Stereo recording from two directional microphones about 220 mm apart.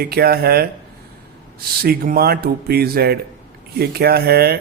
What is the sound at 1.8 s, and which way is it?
Speech, 45° right (ahead or behind).